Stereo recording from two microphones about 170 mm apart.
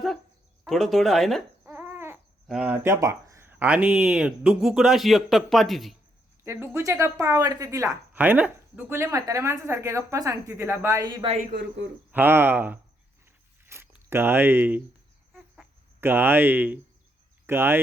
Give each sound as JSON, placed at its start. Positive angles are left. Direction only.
{"t": 0.7, "sound": "speech", "side_deg": 0}
{"t": 1.6, "sound": "a sound", "side_deg": -10}
{"t": 2.5, "sound": "speech", "side_deg": -10}
{"t": 6.4, "sound": "a woman's voice", "side_deg": -15}
{"t": 11.5, "sound": "speech", "side_deg": -90}
{"t": 12.1, "sound": "a woman's voice", "side_deg": -10}
{"t": 16.0, "sound": "a woman's voice", "side_deg": -15}